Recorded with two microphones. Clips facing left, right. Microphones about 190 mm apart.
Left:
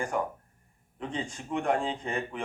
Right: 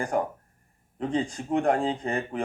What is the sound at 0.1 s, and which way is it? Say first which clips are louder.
Speech: right 4 dB; 40° right (ahead or behind).